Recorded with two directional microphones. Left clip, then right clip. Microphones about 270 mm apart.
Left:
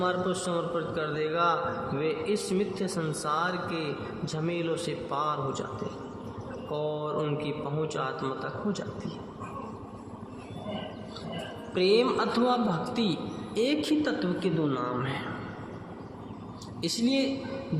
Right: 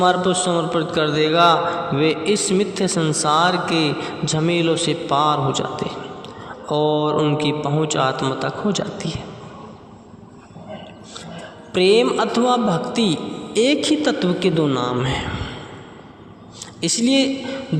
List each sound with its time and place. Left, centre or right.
0.0 s a man's voice: right
6.7 s a man's voice: right
11.7 s a man's voice: right
16.8 s a man's voice: right